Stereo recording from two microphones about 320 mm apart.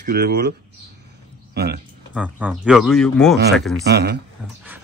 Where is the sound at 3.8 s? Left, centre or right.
Right.